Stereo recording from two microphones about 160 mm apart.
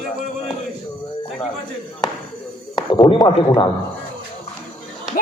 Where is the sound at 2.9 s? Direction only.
30° left (ahead or behind).